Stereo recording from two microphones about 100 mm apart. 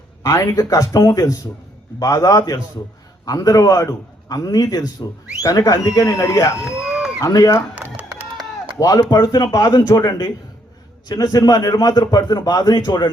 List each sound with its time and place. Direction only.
0.2 s a man's voice: 35° left (ahead or behind)
6.7 s a sound: 5° right (ahead or behind)
7.2 s a man's voice: 35° left (ahead or behind)
7.8 s music: 15° right (ahead or behind)
8.8 s a man's voice: 35° left (ahead or behind)